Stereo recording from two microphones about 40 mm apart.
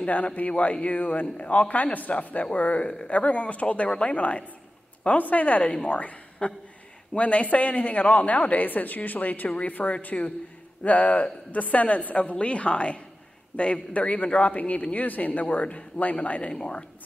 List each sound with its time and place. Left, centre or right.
0.0 s a woman's voice: left